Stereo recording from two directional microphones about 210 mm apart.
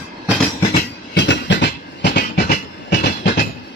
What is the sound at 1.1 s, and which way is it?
Train, 55° left (ahead or behind).